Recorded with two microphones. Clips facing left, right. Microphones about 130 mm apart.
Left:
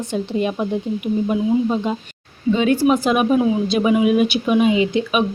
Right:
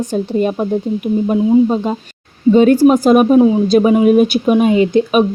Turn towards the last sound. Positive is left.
turn(degrees=-40)  # may be behind; listen again after turning